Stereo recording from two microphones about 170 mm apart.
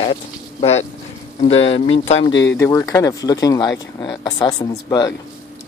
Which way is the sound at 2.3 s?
90° left.